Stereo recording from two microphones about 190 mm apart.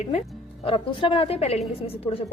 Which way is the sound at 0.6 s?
25° left (ahead or behind).